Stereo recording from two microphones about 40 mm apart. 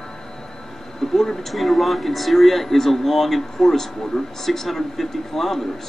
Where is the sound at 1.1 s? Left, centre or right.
Centre.